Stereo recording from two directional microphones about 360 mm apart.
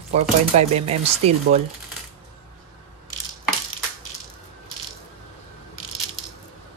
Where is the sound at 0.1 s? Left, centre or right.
Centre.